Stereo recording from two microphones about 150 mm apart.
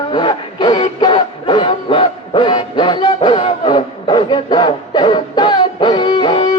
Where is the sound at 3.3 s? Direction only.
35° left (ahead or behind).